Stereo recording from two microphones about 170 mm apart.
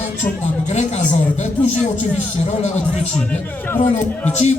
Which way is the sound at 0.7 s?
45° left (ahead or behind).